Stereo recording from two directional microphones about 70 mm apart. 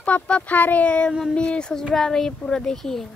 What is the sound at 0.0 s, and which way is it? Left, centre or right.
Speech, centre.